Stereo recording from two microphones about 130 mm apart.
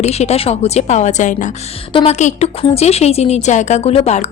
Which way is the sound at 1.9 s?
40° left (ahead or behind).